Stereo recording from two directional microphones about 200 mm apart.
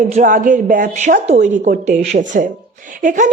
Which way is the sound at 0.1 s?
40° right (ahead or behind).